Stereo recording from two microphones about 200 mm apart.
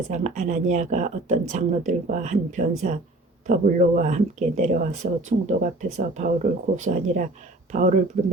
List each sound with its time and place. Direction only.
0.1 s speech: 35° right (ahead or behind)